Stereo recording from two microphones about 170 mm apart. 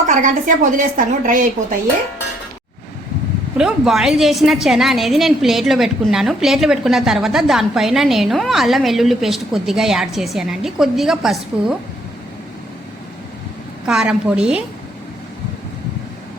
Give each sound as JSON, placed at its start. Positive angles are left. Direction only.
{"t": 0.1, "sound": "a woman's voice", "side_deg": -50}
{"t": 3.6, "sound": "a woman's voice", "side_deg": 0}
{"t": 13.8, "sound": "a woman's voice", "side_deg": -5}